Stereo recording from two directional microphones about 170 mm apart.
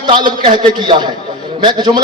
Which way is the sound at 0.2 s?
30° right (ahead or behind).